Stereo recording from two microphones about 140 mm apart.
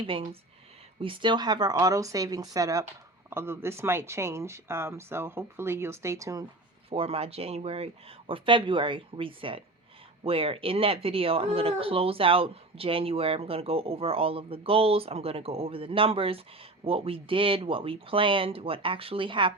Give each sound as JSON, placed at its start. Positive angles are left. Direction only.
{"t": 0.0, "sound": "speech", "side_deg": -40}
{"t": 6.9, "sound": "speech", "side_deg": -45}